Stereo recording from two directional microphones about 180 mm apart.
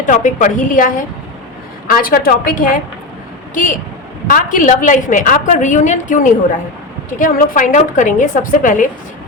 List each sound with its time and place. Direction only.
0.0 s a woman's voice: 45° left (ahead or behind)